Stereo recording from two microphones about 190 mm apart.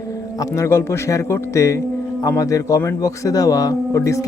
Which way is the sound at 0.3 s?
15° left (ahead or behind).